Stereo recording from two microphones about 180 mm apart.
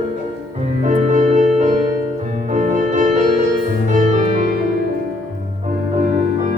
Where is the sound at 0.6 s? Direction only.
40° right (ahead or behind).